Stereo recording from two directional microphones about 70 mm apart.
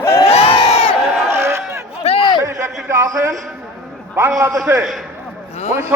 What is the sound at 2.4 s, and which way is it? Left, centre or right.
Speech, right.